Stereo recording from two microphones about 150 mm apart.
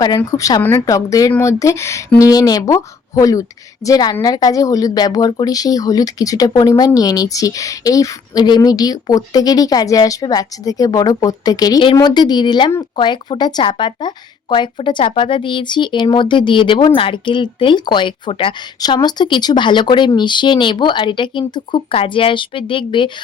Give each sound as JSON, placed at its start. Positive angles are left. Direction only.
{"t": 0.3, "sound": "a woman's voice", "side_deg": 25}
{"t": 0.6, "sound": "a woman's voice", "side_deg": 10}
{"t": 0.9, "sound": "a woman's voice", "side_deg": 20}